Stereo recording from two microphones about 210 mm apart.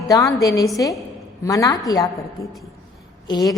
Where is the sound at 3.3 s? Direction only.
20° left (ahead or behind).